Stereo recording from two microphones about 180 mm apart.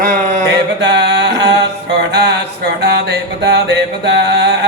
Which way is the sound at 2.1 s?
70° right (ahead or behind).